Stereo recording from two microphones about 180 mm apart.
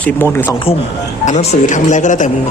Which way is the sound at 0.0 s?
10° left (ahead or behind).